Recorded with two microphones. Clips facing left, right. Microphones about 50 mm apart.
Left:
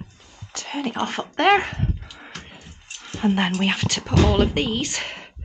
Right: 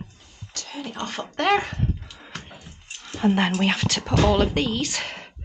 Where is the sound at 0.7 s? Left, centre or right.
Left.